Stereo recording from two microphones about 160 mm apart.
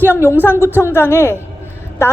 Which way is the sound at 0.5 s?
15° right (ahead or behind).